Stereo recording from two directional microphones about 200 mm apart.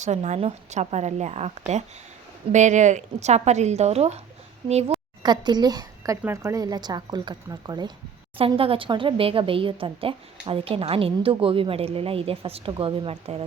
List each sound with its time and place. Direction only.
0.0 s a woman's voice: 35° right (ahead or behind)
4.6 s a woman's voice: 20° right (ahead or behind)